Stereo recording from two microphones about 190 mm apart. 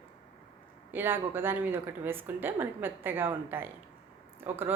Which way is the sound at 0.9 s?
10° right (ahead or behind).